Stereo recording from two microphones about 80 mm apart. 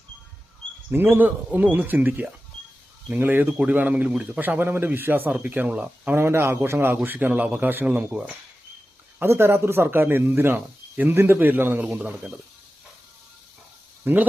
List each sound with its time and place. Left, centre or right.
0.9 s a man's voice: right
6.1 s a man's voice: right
9.1 s a man's voice: right
14.0 s speech: right